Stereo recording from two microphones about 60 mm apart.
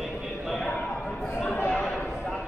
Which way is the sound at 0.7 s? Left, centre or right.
Centre.